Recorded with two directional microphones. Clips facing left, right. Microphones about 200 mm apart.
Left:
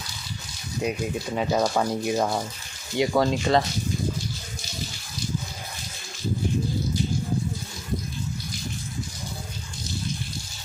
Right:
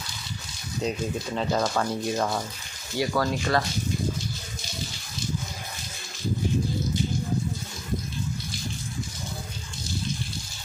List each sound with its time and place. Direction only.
0.8 s speech: 10° left (ahead or behind)